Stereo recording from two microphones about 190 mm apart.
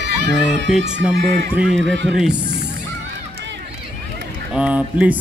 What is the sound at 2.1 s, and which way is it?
Speech, centre (ahead or behind).